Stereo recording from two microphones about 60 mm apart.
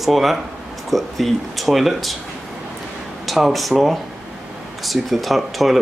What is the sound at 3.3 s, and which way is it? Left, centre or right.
Speech, centre.